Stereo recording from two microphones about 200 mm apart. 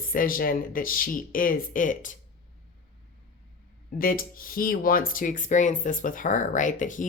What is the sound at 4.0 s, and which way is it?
Speech, 45° left (ahead or behind).